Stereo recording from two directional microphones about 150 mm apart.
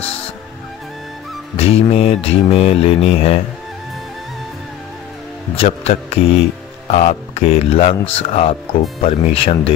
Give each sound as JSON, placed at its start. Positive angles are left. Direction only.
{"t": 1.6, "sound": "mantra", "side_deg": 40}
{"t": 5.6, "sound": "mantra", "side_deg": 45}
{"t": 9.0, "sound": "speech", "side_deg": 40}